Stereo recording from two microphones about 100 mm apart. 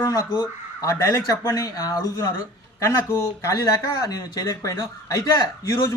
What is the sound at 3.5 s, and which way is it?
A man's voice, 40° left (ahead or behind).